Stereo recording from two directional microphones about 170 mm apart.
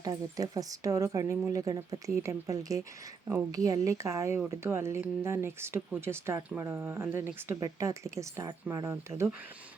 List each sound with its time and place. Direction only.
0.0 s speech: 20° right (ahead or behind)